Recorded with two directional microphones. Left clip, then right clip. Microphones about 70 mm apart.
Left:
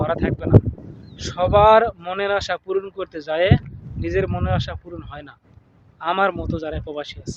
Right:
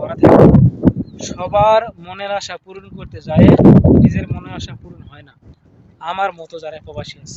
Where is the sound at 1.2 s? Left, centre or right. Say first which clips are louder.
Even; left.